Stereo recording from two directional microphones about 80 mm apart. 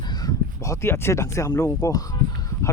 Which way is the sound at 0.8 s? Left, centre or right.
Left.